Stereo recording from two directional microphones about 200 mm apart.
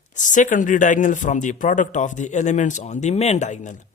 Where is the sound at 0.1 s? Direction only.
40° left (ahead or behind).